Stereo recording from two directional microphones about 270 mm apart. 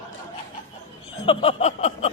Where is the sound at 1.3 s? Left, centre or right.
Left.